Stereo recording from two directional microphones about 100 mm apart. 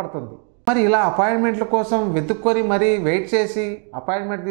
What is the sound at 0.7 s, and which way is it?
A man's voice, 15° right (ahead or behind).